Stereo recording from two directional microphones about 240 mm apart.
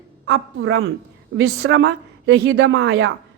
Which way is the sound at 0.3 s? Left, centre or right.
Right.